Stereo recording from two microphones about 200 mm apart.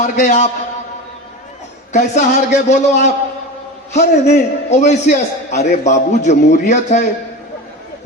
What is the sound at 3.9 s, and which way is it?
A man's voice, 35° left (ahead or behind).